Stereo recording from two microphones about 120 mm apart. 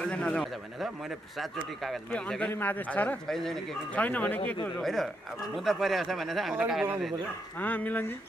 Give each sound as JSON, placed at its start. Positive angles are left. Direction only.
{"t": 0.0, "sound": "speech", "side_deg": 10}
{"t": 2.0, "sound": "speech", "side_deg": 10}
{"t": 7.6, "sound": "speech", "side_deg": 15}